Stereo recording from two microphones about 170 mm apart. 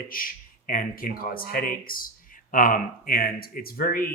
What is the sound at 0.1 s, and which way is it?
Speech, 55° left (ahead or behind).